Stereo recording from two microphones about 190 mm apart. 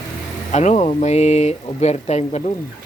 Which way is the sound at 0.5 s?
40° left (ahead or behind).